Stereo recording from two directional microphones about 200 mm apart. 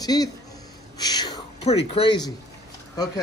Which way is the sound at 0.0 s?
20° left (ahead or behind).